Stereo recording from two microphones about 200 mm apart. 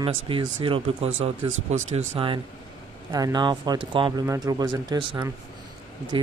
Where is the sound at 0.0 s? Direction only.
25° right (ahead or behind).